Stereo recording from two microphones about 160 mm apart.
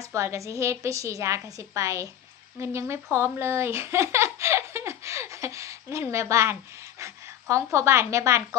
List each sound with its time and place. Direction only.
0.0 s a woman's voice: 20° right (ahead or behind)